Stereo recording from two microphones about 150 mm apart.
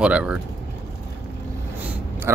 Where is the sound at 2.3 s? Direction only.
15° right (ahead or behind).